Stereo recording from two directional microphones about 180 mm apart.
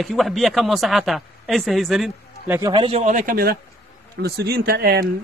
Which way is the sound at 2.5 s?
20° right (ahead or behind).